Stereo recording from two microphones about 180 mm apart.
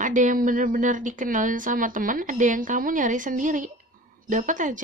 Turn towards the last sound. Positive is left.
turn(degrees=-45)  # may be behind; listen again after turning